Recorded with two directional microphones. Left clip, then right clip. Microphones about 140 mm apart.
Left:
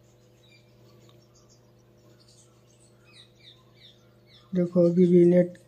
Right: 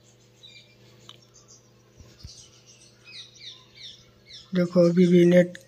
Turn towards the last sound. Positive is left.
turn(degrees=0)  # may be behind; listen again after turning